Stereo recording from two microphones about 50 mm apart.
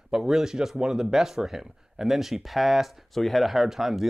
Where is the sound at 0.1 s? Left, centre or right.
Centre.